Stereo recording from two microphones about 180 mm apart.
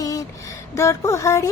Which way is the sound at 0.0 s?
20° left (ahead or behind).